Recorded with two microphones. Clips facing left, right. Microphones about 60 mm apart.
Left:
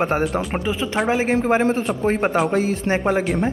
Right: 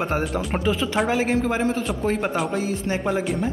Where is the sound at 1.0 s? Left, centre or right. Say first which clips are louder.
Left 6 dB; left.